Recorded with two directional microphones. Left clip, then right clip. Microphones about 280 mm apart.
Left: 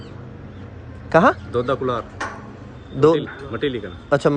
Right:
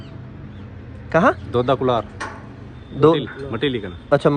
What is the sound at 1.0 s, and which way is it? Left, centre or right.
Speech, centre.